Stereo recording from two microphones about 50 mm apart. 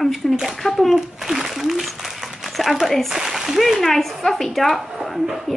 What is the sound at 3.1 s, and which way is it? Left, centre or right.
Speech, centre.